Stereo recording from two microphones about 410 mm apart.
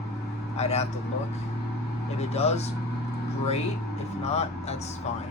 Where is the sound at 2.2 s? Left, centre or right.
Centre.